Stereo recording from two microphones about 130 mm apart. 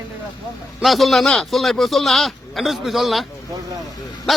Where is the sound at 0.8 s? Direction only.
Centre (ahead or behind).